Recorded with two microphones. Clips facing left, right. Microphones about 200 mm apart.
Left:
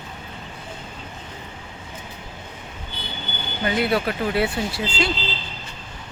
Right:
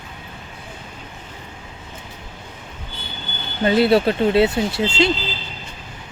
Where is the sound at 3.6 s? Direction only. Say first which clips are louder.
Right 7 dB; 30° right (ahead or behind).